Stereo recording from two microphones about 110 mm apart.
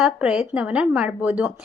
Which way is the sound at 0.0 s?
5° right (ahead or behind).